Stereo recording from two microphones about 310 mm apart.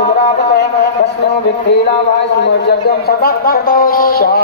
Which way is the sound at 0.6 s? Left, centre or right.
Left.